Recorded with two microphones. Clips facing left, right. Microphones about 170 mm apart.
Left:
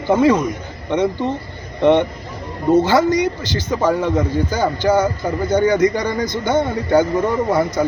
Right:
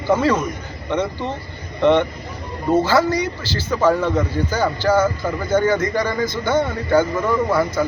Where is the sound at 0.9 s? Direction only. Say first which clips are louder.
Left 4 dB; 15° left (ahead or behind).